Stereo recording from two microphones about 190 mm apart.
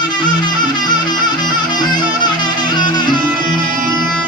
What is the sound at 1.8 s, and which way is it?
Music, 25° left (ahead or behind).